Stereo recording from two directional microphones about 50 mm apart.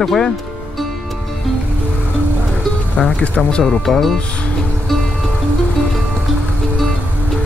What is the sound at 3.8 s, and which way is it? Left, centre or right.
Speech, centre.